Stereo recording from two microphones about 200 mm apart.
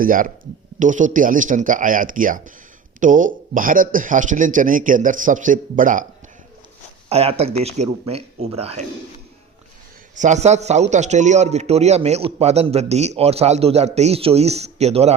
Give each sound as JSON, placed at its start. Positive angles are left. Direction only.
{"t": 0.0, "sound": "a man's voice", "side_deg": -45}
{"t": 7.1, "sound": "a man's voice", "side_deg": -30}
{"t": 10.2, "sound": "a man's voice", "side_deg": -35}